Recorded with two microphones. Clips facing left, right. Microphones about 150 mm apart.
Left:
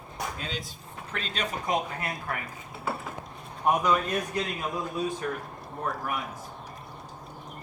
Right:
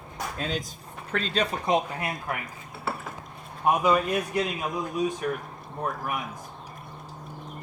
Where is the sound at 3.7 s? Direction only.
10° right (ahead or behind).